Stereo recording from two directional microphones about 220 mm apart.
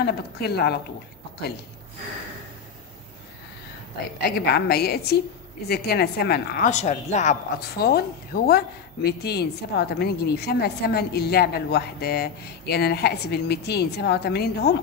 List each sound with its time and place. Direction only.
0.0 s a woman's voice: 45° left (ahead or behind)
4.5 s a woman's voice: 45° left (ahead or behind)